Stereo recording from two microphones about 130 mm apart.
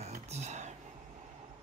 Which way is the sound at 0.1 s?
60° right (ahead or behind).